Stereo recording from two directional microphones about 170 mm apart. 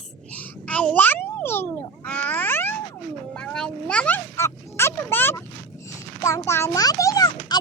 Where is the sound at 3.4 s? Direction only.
5° left (ahead or behind).